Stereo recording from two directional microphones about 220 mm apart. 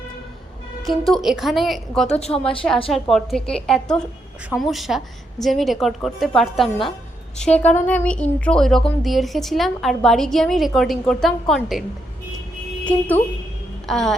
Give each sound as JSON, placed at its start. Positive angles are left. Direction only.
{"t": 0.9, "sound": "speech", "side_deg": 0}
{"t": 2.0, "sound": "a woman's voice", "side_deg": 30}
{"t": 2.9, "sound": "speech", "side_deg": 0}
{"t": 12.8, "sound": "speech", "side_deg": 5}